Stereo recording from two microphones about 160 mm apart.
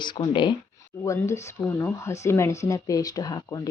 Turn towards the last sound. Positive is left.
turn(degrees=25)  # may be behind; listen again after turning